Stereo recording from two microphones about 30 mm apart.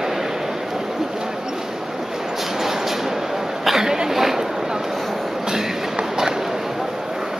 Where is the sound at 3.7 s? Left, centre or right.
Centre.